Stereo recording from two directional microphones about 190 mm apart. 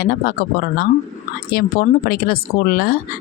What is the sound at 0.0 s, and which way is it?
Speech, 55° left (ahead or behind).